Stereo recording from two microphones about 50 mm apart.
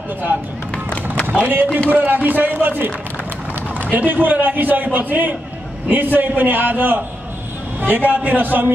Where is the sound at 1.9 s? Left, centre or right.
Right.